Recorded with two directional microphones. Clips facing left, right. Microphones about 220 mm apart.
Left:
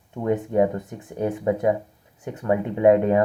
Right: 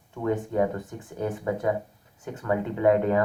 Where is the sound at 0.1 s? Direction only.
20° left (ahead or behind).